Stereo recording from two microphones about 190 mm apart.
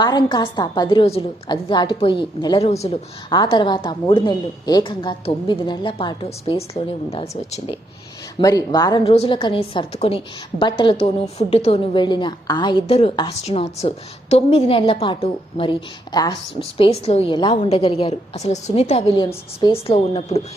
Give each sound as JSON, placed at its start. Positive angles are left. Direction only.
{"t": 0.0, "sound": "a woman's voice", "side_deg": 20}
{"t": 3.3, "sound": "a woman's voice", "side_deg": 25}
{"t": 8.4, "sound": "a woman's voice", "side_deg": 20}